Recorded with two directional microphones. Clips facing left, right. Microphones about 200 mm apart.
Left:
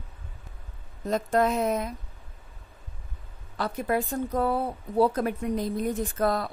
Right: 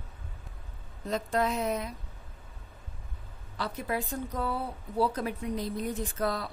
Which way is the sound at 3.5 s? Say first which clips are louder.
Left 6 dB; 50° left (ahead or behind).